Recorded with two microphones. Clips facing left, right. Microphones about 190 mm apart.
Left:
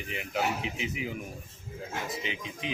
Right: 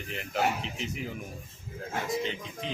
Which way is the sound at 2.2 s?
10° left (ahead or behind).